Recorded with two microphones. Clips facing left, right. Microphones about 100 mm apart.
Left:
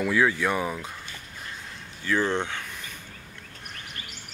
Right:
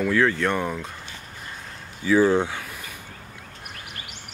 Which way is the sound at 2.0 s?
10° right (ahead or behind).